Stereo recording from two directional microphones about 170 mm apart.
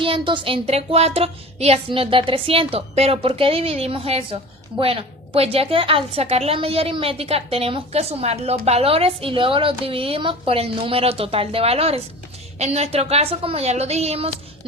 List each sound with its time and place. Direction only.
0.0 s a woman's voice: 30° right (ahead or behind)